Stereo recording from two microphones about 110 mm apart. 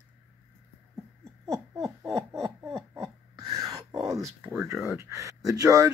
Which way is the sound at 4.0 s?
30° right (ahead or behind).